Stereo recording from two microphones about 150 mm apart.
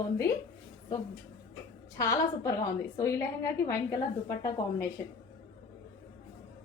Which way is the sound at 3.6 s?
20° left (ahead or behind).